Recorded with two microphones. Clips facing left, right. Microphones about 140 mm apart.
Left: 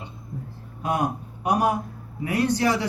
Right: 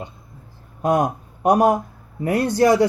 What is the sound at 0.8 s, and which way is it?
Speech, 45° right (ahead or behind).